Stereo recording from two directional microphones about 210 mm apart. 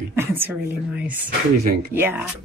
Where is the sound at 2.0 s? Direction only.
10° right (ahead or behind).